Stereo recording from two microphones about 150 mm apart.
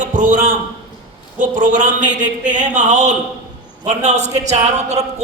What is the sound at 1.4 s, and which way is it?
A man's voice, 60° right (ahead or behind).